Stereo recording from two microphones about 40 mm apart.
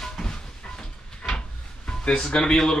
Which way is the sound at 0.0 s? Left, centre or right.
Centre.